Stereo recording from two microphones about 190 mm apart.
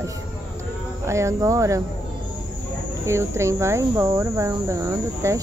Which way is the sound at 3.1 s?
15° right (ahead or behind).